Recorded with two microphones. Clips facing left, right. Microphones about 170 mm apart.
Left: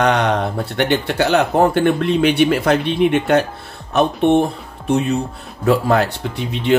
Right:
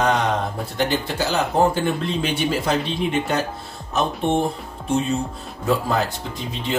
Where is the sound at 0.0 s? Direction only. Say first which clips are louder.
Left 4 dB; 70° left (ahead or behind).